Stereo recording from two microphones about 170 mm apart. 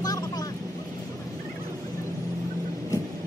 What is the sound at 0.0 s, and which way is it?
Vehicle, 20° left (ahead or behind).